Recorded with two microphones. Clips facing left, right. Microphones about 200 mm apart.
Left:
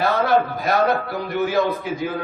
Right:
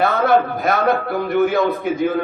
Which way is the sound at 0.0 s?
55° right (ahead or behind).